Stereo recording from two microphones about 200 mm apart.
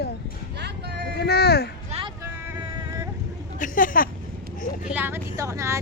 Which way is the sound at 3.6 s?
40° left (ahead or behind).